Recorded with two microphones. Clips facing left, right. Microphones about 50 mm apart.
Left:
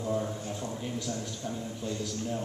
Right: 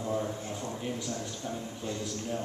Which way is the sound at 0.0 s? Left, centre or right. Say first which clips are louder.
Left 1 dB; centre.